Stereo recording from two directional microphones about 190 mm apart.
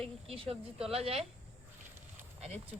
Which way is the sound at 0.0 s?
30° right (ahead or behind).